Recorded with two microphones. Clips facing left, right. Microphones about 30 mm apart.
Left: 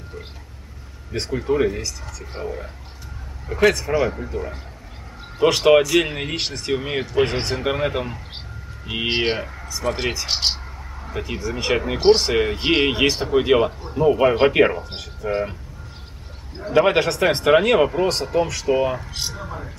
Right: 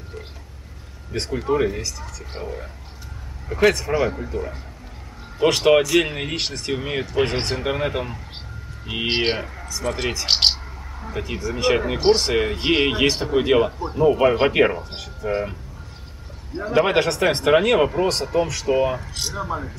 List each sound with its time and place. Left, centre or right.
1.1 s speech: centre
2.4 s a sound: centre
3.4 s speech: centre
10.2 s speech: right
10.5 s speech: centre
16.7 s speech: centre